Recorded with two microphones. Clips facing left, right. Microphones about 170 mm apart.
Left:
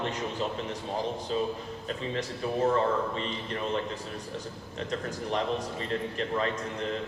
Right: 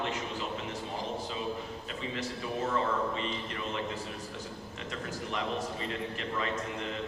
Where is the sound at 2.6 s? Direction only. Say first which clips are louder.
Left 4 dB; 40° left (ahead or behind).